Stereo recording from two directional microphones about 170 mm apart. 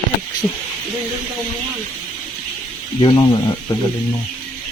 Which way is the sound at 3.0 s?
25° left (ahead or behind).